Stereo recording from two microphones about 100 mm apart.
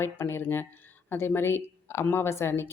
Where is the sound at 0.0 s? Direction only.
25° left (ahead or behind).